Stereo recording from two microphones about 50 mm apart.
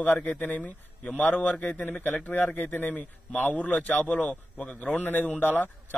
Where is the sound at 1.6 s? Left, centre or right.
Left.